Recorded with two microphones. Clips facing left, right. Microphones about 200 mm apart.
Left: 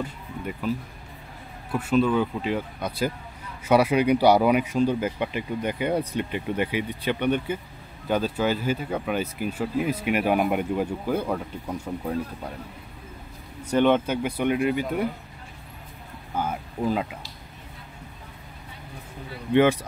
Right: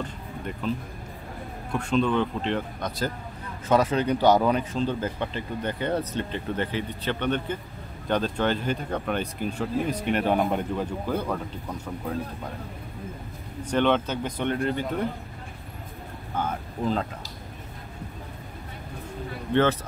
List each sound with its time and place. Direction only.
0.0 s a sound: 5° left (ahead or behind)
1.7 s speech: 5° left (ahead or behind)
13.7 s speech: 10° left (ahead or behind)
16.3 s speech: 10° left (ahead or behind)
19.5 s speech: 10° left (ahead or behind)